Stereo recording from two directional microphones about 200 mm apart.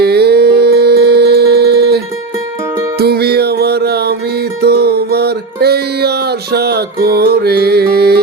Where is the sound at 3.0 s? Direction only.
50° right (ahead or behind).